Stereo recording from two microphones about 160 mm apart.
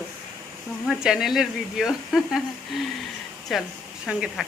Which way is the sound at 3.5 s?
Centre (ahead or behind).